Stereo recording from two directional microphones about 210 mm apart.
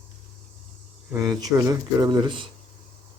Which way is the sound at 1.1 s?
20° right (ahead or behind).